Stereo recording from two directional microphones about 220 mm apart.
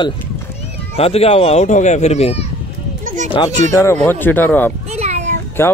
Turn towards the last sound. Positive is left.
turn(degrees=10)  # may be behind; listen again after turning